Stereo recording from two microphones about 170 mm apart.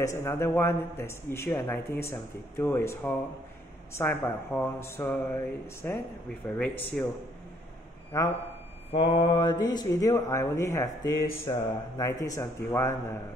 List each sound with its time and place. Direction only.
0.0 s speech: 15° left (ahead or behind)
8.1 s speech: 20° left (ahead or behind)
8.9 s speech: 30° left (ahead or behind)